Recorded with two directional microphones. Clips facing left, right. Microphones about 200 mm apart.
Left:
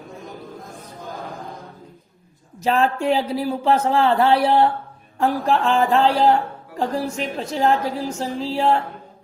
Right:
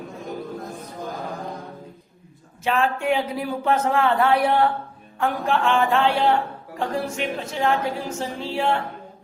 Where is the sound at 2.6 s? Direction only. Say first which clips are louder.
Left 3 dB; 35° left (ahead or behind).